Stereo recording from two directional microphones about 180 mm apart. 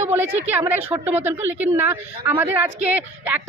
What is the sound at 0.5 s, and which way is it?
A woman's voice, 10° right (ahead or behind).